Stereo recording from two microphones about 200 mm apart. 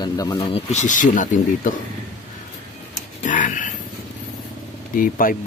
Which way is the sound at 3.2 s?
40° left (ahead or behind).